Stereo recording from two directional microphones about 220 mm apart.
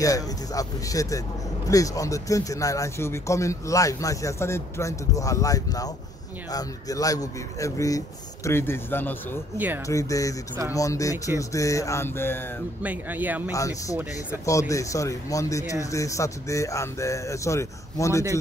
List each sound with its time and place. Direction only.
0.0 s speech: 15° left (ahead or behind)
12.8 s speech: 5° right (ahead or behind)
13.5 s speech: 15° left (ahead or behind)